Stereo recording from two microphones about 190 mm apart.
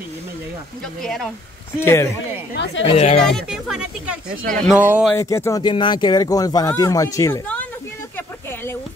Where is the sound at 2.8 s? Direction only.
30° left (ahead or behind).